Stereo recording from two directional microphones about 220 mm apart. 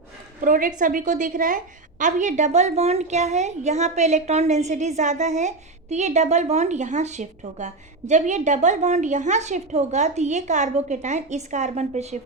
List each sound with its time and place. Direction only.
0.4 s a woman's voice: 35° right (ahead or behind)